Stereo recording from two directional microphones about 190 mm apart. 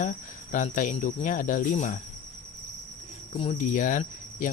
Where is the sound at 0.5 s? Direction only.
45° left (ahead or behind).